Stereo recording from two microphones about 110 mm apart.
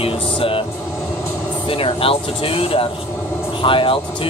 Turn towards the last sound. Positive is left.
turn(degrees=50)  # may be behind; listen again after turning